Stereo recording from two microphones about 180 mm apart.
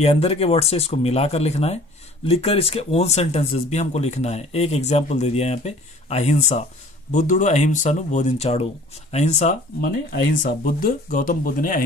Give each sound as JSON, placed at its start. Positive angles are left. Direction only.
{"t": 0.0, "sound": "speech", "side_deg": 35}